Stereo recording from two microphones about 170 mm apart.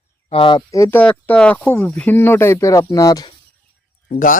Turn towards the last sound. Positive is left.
turn(degrees=50)  # may be behind; listen again after turning